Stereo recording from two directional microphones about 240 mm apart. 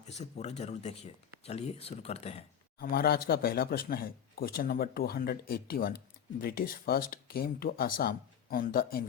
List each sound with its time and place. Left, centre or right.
0.0 s speech: left
2.7 s speech: left